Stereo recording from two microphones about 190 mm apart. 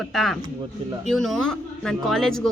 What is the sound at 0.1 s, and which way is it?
Speech, centre (ahead or behind).